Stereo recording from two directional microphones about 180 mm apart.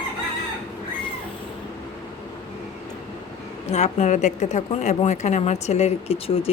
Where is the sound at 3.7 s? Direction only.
40° left (ahead or behind).